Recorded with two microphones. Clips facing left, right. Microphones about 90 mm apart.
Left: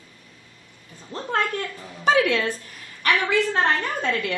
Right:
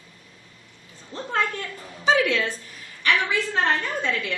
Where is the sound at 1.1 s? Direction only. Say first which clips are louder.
Left 1 dB; 40° left (ahead or behind).